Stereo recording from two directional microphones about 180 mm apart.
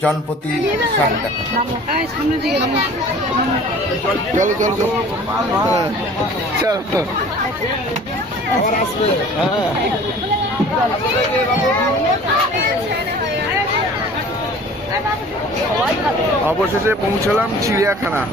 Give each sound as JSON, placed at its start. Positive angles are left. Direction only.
{"t": 4.4, "sound": "speech", "side_deg": -45}
{"t": 16.5, "sound": "speech", "side_deg": -10}